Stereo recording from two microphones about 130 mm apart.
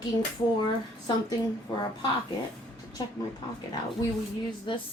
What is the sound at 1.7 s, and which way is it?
Speech, 35° left (ahead or behind).